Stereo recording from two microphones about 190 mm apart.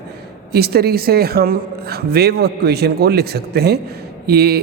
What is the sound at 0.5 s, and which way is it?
A woman's voice, 55° right (ahead or behind).